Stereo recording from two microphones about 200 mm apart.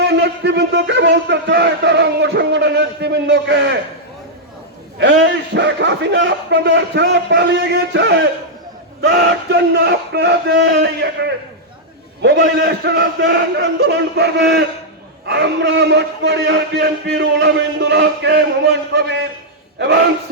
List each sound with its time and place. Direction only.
0.0 s a man's voice: 60° right (ahead or behind)
4.9 s a man's voice: 60° right (ahead or behind)